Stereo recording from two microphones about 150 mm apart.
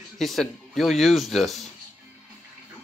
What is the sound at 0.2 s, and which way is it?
Speech, centre (ahead or behind).